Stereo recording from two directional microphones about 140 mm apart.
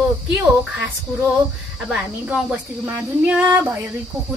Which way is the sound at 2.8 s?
15° right (ahead or behind).